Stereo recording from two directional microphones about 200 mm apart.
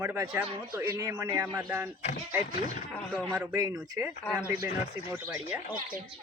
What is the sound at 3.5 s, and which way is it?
Speech, 15° right (ahead or behind).